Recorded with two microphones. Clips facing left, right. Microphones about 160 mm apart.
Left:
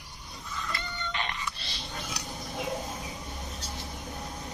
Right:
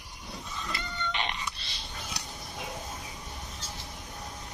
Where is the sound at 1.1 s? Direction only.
20° right (ahead or behind).